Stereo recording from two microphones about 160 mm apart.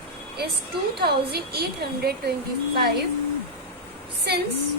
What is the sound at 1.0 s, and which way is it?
A woman's voice, 85° right.